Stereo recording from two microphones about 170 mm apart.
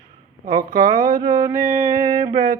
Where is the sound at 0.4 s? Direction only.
55° right (ahead or behind).